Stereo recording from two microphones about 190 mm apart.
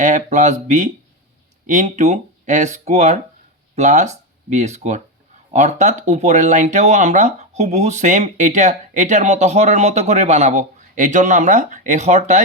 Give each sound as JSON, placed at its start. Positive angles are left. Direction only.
{"t": 0.0, "sound": "speech", "side_deg": -40}